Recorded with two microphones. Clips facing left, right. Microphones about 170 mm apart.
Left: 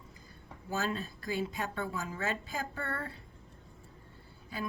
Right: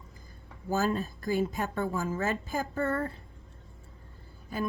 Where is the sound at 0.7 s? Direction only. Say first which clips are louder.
Right 6 dB; 40° right (ahead or behind).